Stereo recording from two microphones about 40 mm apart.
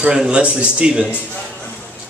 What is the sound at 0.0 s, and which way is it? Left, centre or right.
Speech, right.